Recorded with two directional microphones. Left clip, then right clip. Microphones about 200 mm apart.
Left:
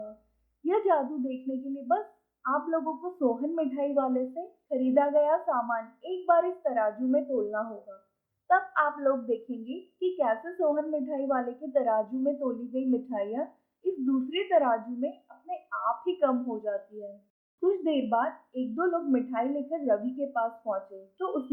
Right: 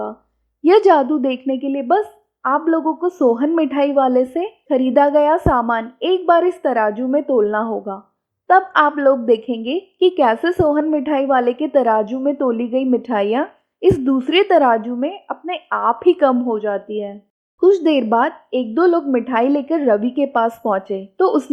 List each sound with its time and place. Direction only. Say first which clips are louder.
0.6 s a woman's voice: right 14 dB; 45° right (ahead or behind)